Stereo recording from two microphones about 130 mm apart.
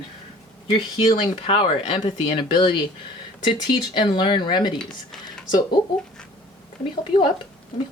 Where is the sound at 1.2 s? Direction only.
45° left (ahead or behind).